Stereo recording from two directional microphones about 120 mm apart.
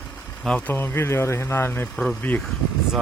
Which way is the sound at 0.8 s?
20° left (ahead or behind).